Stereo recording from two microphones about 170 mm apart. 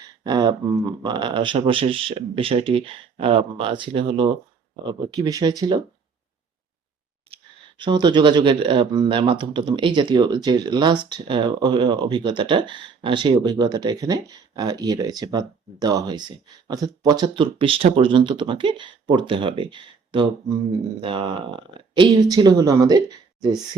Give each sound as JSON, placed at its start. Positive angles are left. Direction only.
{"t": 0.3, "sound": "speech", "side_deg": -25}
{"t": 7.8, "sound": "speech", "side_deg": -25}